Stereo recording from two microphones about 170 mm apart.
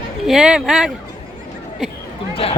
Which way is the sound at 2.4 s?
35° left (ahead or behind).